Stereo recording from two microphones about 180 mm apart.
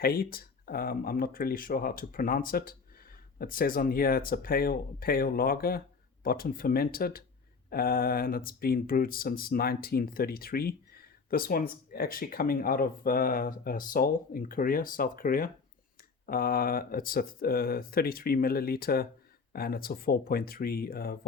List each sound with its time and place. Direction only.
0.0 s speech: 55° left (ahead or behind)